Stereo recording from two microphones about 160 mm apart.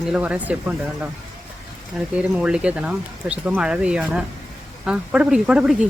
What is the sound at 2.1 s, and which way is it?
Speech, 5° right (ahead or behind).